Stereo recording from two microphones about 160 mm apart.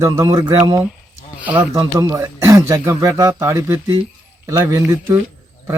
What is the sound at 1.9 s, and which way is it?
Speech, 20° right (ahead or behind).